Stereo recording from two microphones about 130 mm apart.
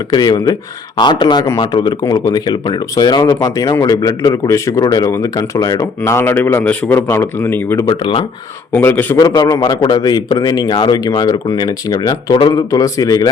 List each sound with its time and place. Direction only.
0.1 s a man's voice: 35° left (ahead or behind)
6.1 s a man's voice: 20° left (ahead or behind)
7.9 s a man's voice: 40° left (ahead or behind)
8.7 s a man's voice: 15° left (ahead or behind)
9.2 s a man's voice: 35° left (ahead or behind)